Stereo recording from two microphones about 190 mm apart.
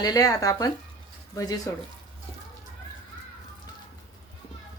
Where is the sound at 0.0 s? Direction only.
20° left (ahead or behind).